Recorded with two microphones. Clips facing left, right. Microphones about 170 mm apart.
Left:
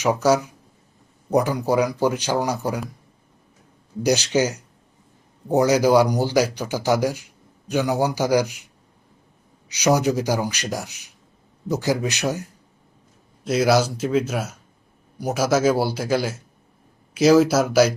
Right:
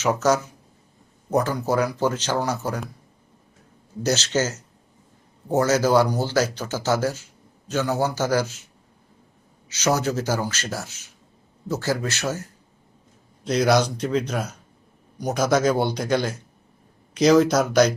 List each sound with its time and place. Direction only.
0.0 s speech: 10° left (ahead or behind)
4.0 s speech: 15° left (ahead or behind)
13.4 s speech: 5° left (ahead or behind)